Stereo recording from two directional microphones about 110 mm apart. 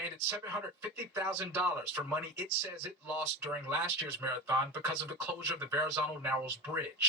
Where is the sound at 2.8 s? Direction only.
20° right (ahead or behind).